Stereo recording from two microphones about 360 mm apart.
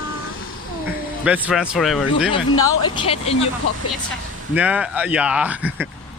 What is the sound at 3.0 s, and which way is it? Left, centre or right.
Speech, centre.